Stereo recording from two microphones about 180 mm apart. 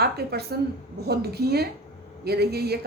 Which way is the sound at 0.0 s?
60° right (ahead or behind).